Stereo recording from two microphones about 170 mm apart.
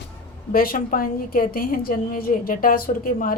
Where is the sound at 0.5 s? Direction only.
60° left (ahead or behind).